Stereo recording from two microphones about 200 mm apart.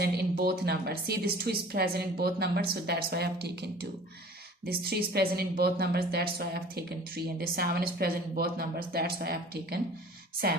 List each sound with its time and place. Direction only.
0.0 s a woman's voice: 50° right (ahead or behind)